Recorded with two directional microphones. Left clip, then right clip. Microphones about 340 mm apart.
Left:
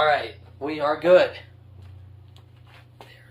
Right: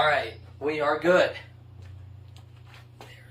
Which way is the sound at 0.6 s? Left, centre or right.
Left.